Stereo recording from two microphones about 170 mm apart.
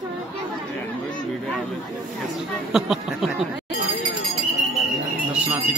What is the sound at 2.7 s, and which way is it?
Speech, 5° right (ahead or behind).